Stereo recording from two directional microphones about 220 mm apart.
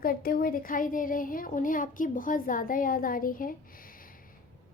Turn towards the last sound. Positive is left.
turn(degrees=40)  # may be behind; listen again after turning